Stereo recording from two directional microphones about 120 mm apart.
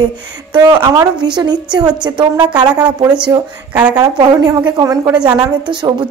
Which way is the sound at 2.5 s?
10° right (ahead or behind).